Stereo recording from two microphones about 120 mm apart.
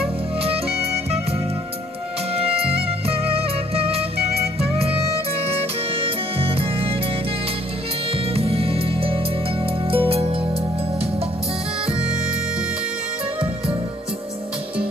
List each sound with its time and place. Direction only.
2.3 s music: 55° right (ahead or behind)
5.5 s music: 50° right (ahead or behind)
8.4 s music: 55° right (ahead or behind)